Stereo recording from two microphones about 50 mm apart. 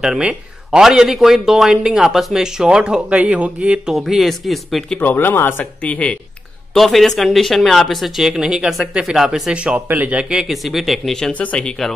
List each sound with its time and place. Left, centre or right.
0.2 s a man's voice: centre
3.9 s speech: centre
5.0 s speech: left
5.9 s speech: left
6.7 s speech: centre
8.2 s a man's voice: centre
9.8 s speech: right
10.5 s speech: centre
11.1 s speech: centre
11.3 s speech: left